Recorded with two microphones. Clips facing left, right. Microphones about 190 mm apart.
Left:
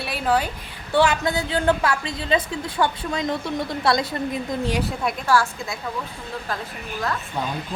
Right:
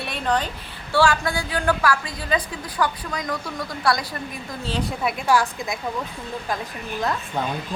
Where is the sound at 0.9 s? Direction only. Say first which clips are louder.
Left 1 dB; 20° left (ahead or behind).